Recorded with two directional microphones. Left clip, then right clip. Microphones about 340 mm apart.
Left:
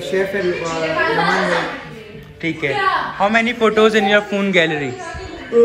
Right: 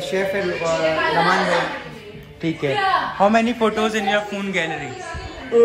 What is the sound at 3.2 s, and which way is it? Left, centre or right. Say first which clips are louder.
A man's voice: left 1 dB; centre.